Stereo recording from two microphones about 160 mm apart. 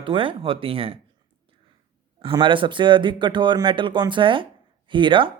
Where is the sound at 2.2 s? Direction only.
30° right (ahead or behind).